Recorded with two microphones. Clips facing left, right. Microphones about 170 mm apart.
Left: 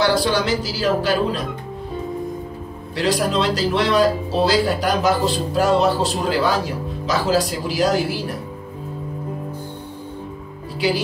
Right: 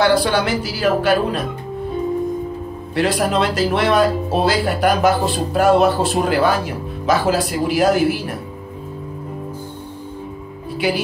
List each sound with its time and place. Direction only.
0.0 s speech: 55° right (ahead or behind)
3.0 s speech: 55° right (ahead or behind)